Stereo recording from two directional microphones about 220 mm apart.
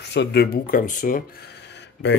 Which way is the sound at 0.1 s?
50° left (ahead or behind).